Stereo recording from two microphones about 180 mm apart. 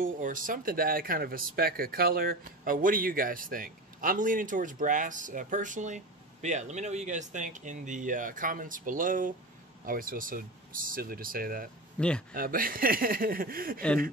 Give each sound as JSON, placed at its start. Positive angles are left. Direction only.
{"t": 0.0, "sound": "speech", "side_deg": -50}
{"t": 12.0, "sound": "speech", "side_deg": 5}
{"t": 12.4, "sound": "speech", "side_deg": -50}